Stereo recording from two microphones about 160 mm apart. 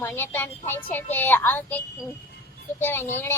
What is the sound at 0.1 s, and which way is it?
A woman's voice, 15° left (ahead or behind).